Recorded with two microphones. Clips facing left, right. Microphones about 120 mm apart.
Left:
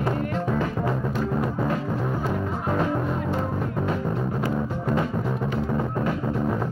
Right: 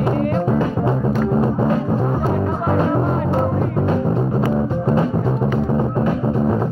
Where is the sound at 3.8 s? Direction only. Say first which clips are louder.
Right 7 dB; 30° right (ahead or behind).